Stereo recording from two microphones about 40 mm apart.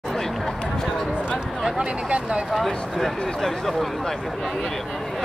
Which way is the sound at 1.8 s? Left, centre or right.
Right.